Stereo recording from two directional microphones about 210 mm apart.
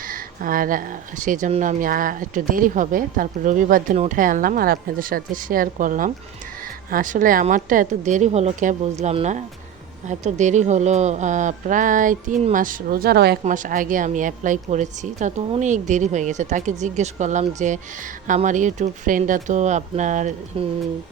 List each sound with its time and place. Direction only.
0.0 s a woman's voice: 40° right (ahead or behind)
13.4 s a woman's voice: 40° right (ahead or behind)
20.5 s speech: 25° right (ahead or behind)